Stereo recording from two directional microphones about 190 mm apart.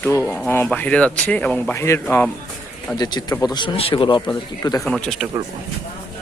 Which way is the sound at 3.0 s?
20° left (ahead or behind).